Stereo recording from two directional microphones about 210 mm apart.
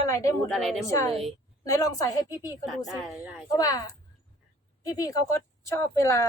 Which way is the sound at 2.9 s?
5° right (ahead or behind).